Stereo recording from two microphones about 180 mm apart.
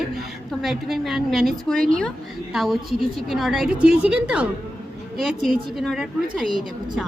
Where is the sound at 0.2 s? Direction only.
Centre (ahead or behind).